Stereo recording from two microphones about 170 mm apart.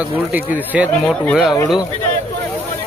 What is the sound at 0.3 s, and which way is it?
Speech, 10° right (ahead or behind).